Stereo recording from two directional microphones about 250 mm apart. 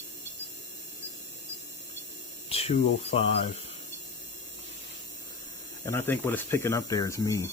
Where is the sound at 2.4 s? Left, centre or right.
Left.